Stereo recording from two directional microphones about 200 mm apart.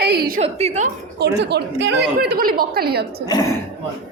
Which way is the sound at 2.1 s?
45° right (ahead or behind).